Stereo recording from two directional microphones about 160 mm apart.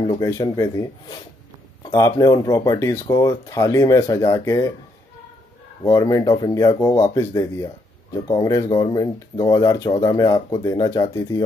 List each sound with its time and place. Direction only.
0.0 s speech: 25° left (ahead or behind)
1.9 s speech: 25° left (ahead or behind)
5.9 s speech: 20° left (ahead or behind)